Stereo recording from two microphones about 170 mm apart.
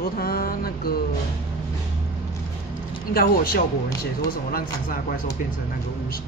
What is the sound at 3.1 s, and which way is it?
Speech, 60° left (ahead or behind).